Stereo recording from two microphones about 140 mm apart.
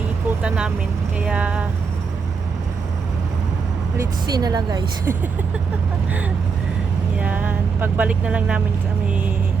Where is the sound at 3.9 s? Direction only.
25° right (ahead or behind).